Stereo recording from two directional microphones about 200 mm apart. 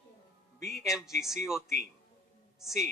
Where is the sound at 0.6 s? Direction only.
Centre (ahead or behind).